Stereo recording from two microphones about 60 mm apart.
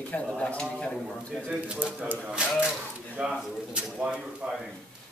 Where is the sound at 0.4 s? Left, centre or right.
Centre.